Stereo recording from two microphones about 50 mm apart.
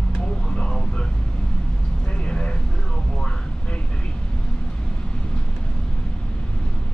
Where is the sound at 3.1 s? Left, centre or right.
Centre.